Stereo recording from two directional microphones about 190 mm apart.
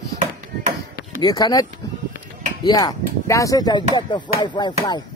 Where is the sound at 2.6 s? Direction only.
20° left (ahead or behind).